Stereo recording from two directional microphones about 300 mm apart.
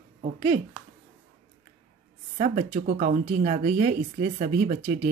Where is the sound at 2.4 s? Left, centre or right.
Right.